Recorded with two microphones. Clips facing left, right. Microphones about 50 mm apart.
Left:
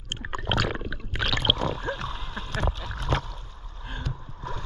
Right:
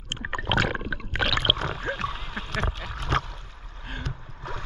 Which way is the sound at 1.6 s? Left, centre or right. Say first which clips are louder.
Even; right.